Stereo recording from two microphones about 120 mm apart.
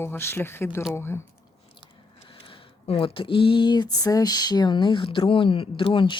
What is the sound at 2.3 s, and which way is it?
A woman's voice, 45° left (ahead or behind).